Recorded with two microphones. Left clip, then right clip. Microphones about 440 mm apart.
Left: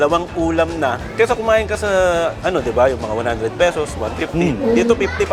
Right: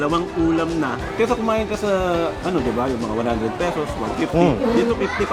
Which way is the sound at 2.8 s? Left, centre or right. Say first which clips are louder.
Left 9 dB; left.